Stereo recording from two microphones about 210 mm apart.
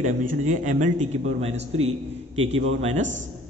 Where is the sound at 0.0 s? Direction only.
35° right (ahead or behind).